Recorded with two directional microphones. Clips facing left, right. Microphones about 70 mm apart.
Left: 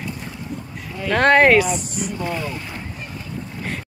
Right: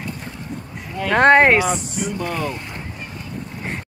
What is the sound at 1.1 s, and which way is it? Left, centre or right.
Speech, right.